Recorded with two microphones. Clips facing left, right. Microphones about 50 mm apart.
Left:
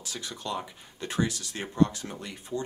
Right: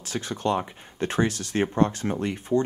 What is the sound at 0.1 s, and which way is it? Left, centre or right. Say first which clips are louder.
Speech: right 9 dB; right.